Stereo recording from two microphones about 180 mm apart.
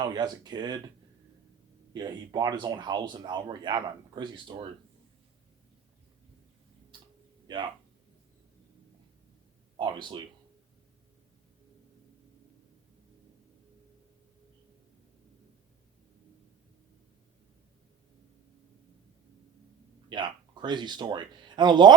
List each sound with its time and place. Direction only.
0.0 s speech: 25° right (ahead or behind)
1.9 s speech: 25° right (ahead or behind)
6.9 s tick-tock: 25° right (ahead or behind)
7.4 s speech: 25° right (ahead or behind)
9.7 s speech: 25° right (ahead or behind)
20.1 s speech: 25° right (ahead or behind)